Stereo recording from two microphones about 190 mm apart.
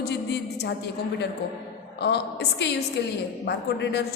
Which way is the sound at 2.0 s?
60° left (ahead or behind).